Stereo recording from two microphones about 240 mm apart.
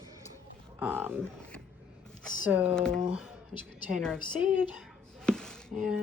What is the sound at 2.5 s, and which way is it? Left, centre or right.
Speech, centre.